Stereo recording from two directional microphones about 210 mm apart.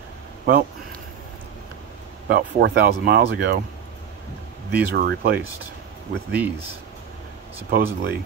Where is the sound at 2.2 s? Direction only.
45° right (ahead or behind).